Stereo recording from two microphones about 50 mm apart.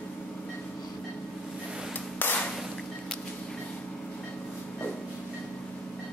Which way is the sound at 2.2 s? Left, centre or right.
Left.